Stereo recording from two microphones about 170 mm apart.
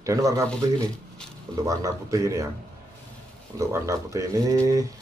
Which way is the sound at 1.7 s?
20° right (ahead or behind).